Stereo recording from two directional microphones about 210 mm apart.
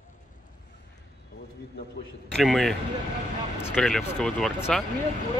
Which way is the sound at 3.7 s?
Centre (ahead or behind).